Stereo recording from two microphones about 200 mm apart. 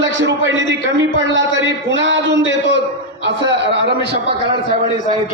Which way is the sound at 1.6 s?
65° right (ahead or behind).